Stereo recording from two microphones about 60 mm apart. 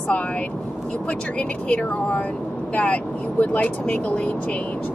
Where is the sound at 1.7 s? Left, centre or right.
Centre.